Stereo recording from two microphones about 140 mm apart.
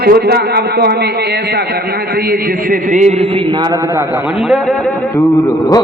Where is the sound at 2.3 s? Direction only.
70° right (ahead or behind).